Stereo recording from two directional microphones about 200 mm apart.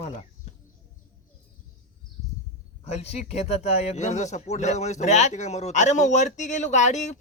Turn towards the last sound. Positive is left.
turn(degrees=35)  # may be behind; listen again after turning